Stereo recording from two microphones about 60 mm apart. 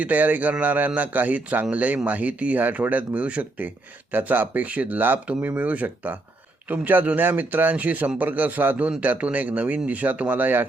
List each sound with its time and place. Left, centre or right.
0.0 s speech: right